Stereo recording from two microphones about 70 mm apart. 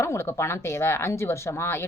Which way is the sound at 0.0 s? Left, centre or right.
Left.